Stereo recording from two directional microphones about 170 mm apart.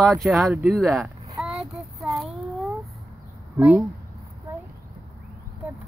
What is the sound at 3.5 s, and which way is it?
Speech, 5° right (ahead or behind).